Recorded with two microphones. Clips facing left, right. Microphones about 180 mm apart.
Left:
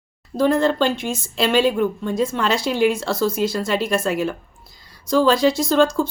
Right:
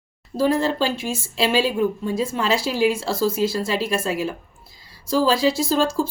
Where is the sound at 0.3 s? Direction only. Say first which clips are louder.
Left 2 dB; 5° right (ahead or behind).